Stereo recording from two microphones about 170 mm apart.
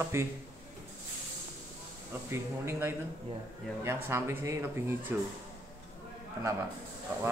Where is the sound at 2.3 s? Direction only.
15° right (ahead or behind).